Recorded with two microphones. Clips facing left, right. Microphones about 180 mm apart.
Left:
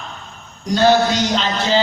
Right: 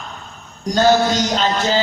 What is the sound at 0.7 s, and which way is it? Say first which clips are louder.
A man's voice: even; 45° right (ahead or behind).